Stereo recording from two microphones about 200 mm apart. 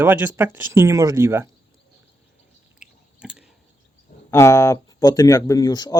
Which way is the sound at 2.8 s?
5° right (ahead or behind).